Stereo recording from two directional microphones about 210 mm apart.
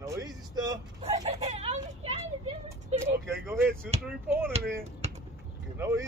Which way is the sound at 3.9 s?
30° right (ahead or behind).